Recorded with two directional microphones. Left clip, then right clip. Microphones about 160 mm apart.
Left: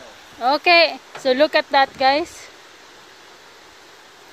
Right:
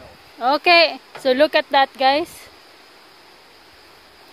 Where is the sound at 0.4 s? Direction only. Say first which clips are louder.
Even; 20° right (ahead or behind).